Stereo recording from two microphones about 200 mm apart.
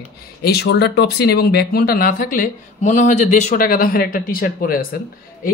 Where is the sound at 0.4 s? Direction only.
55° left (ahead or behind).